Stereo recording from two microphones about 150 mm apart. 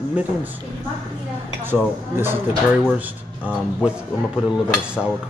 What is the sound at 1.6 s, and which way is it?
Speech, 15° right (ahead or behind).